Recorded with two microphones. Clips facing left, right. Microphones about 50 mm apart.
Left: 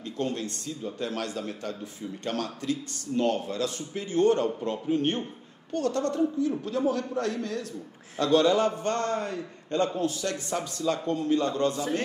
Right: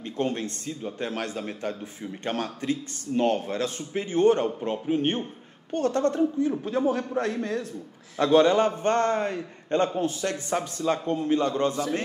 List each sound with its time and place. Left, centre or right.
0.0 s a man's voice: right